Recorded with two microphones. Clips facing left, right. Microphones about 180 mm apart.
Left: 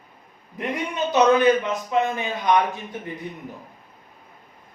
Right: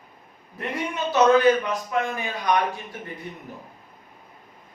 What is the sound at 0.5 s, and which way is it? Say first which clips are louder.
A man's voice: left 2 dB; 20° left (ahead or behind).